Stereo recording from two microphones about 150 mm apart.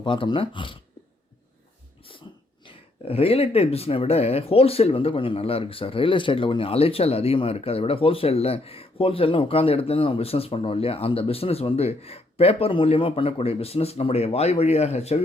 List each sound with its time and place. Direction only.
0.0 s speech: 35° left (ahead or behind)
2.3 s cough: 35° left (ahead or behind)
2.6 s speech: 40° left (ahead or behind)